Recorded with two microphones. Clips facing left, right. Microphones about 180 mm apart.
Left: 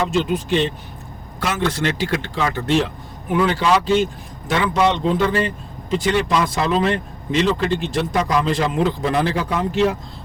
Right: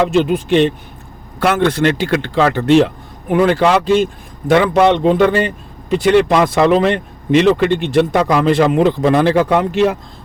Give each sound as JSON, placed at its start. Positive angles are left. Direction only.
{"t": 0.0, "sound": "speech", "side_deg": -60}